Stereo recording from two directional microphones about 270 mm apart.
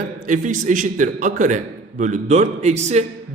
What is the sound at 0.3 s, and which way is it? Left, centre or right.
A man's voice, right.